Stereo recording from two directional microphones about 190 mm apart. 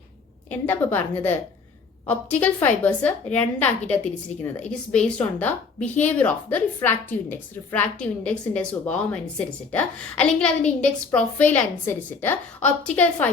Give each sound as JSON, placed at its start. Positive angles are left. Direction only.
{"t": 0.5, "sound": "a woman's voice", "side_deg": 10}